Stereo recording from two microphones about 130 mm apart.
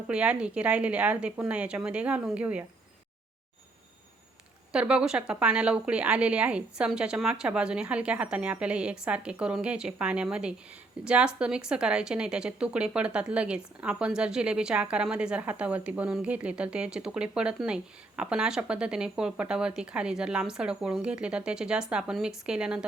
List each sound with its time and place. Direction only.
0.1 s a woman's voice: 10° right (ahead or behind)
4.7 s a woman's voice: 10° right (ahead or behind)